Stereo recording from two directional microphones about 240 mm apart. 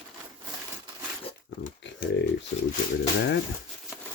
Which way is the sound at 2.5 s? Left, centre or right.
Left.